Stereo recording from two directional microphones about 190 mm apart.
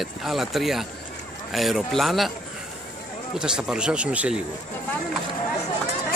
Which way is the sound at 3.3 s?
5° right (ahead or behind).